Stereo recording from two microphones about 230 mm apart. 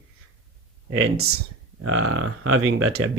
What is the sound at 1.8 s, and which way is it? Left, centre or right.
Speech, right.